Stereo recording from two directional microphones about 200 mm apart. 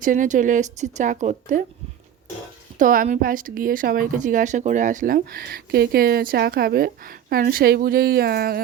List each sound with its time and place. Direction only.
0.0 s a woman's voice: 40° right (ahead or behind)
2.7 s a woman's voice: 45° right (ahead or behind)